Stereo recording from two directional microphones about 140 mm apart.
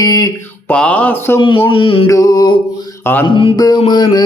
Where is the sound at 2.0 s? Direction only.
25° left (ahead or behind).